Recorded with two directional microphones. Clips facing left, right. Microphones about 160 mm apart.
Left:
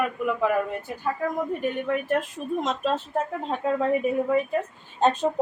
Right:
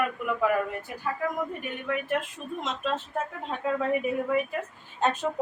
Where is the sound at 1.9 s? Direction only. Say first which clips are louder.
Right 1 dB; 40° left (ahead or behind).